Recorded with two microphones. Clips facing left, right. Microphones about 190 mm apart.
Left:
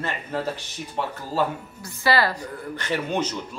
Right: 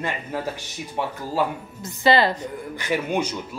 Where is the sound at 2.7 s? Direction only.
10° right (ahead or behind).